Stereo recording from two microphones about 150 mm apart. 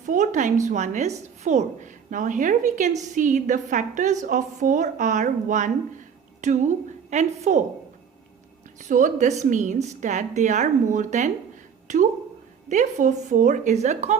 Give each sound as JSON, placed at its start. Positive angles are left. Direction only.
{"t": 0.0, "sound": "a woman's voice", "side_deg": -55}
{"t": 8.8, "sound": "a woman's voice", "side_deg": -55}